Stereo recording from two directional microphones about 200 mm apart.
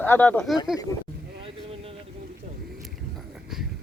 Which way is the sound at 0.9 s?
15° left (ahead or behind).